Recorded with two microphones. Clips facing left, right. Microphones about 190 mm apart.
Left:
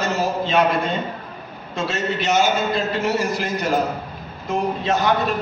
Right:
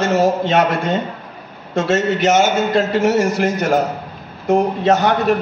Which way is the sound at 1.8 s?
85° right.